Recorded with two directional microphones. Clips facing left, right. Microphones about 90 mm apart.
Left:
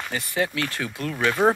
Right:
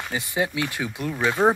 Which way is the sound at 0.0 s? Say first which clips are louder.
Even; 15° right (ahead or behind).